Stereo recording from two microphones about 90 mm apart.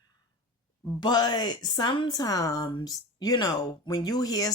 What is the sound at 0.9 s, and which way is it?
Speech, 50° left (ahead or behind).